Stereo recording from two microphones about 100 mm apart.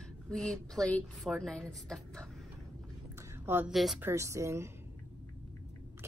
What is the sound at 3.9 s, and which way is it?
Speech, 25° right (ahead or behind).